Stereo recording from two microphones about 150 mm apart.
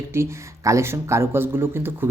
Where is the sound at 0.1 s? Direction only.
20° right (ahead or behind).